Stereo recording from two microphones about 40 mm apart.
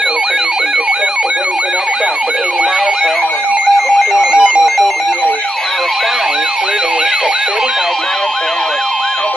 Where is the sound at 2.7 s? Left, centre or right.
Centre.